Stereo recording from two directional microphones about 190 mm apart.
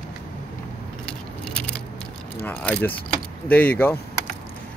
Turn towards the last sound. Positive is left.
turn(degrees=10)  # may be behind; listen again after turning